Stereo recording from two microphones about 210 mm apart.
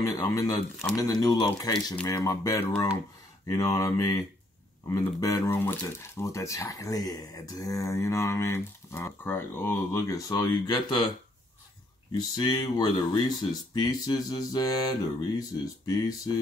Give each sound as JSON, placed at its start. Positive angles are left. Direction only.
{"t": 0.0, "sound": "speech", "side_deg": 15}
{"t": 12.2, "sound": "mantra", "side_deg": 20}